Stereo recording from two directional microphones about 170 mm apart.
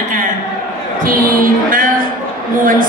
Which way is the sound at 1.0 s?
55° right (ahead or behind).